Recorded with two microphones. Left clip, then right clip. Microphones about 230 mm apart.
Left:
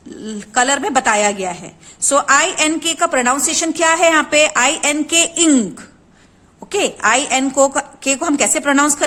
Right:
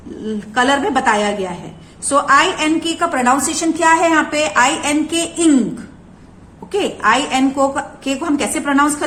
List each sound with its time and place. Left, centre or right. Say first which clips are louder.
0.3 s a woman's voice: right 1 dB; left
6.7 s a woman's voice: even; left